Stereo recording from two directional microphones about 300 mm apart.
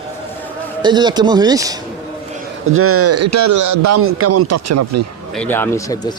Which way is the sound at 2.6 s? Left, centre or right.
Right.